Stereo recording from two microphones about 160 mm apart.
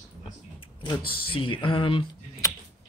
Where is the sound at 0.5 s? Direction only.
25° left (ahead or behind).